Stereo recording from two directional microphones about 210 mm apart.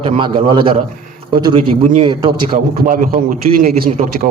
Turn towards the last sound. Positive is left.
turn(degrees=-40)  # may be behind; listen again after turning